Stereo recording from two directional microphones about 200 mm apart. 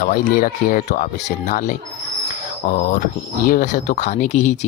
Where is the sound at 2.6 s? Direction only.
40° left (ahead or behind).